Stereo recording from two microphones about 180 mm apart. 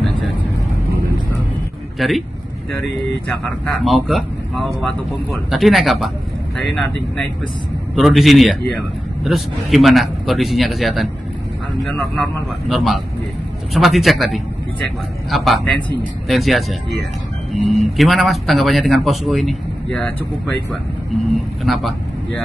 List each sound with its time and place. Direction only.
2.0 s speech: centre (ahead or behind)
3.6 s speech: centre (ahead or behind)
7.9 s speech: centre (ahead or behind)
21.6 s speech: centre (ahead or behind)